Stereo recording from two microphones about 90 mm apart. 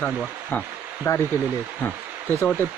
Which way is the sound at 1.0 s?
25° left (ahead or behind).